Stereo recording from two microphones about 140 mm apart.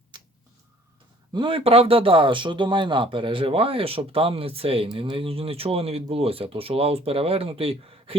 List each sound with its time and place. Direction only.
1.3 s speech: 35° right (ahead or behind)